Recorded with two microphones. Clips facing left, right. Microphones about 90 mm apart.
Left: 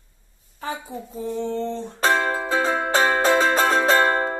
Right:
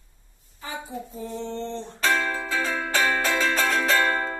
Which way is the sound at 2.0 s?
30° left (ahead or behind).